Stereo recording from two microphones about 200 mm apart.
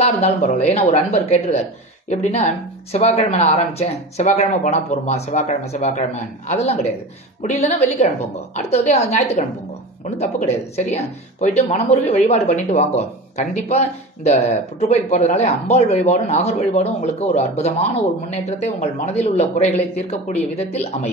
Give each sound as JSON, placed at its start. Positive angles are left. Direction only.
{"t": 0.0, "sound": "speech", "side_deg": 30}